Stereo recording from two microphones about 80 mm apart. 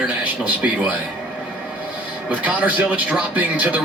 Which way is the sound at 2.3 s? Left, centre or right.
Centre.